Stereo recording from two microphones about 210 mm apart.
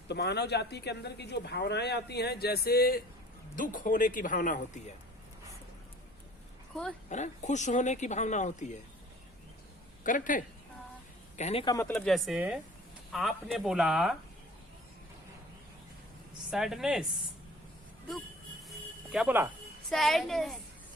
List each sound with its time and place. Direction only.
0.1 s speech: 55° left (ahead or behind)
7.1 s speech: 35° left (ahead or behind)
10.0 s speech: 40° left (ahead or behind)
11.9 s speech: 5° left (ahead or behind)
16.5 s speech: centre (ahead or behind)
19.1 s speech: 10° right (ahead or behind)